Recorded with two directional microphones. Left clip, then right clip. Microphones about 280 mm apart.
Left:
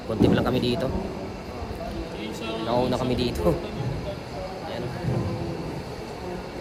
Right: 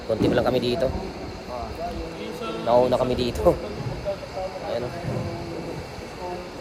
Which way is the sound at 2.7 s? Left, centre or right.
Centre.